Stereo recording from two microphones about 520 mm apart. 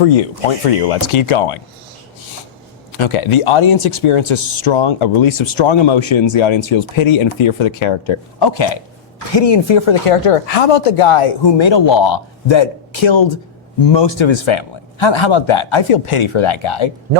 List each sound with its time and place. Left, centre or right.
0.0 s speech: left
0.9 s speech: left
3.0 s speech: left